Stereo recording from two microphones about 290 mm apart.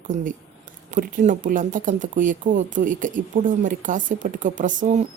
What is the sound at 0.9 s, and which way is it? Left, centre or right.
Speech, right.